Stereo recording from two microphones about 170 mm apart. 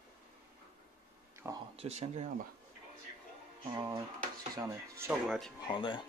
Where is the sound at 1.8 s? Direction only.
40° right (ahead or behind).